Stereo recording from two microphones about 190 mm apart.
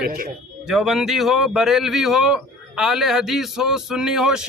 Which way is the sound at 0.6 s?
Centre (ahead or behind).